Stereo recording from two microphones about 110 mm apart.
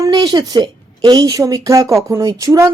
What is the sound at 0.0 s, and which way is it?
A woman's voice, 35° right (ahead or behind).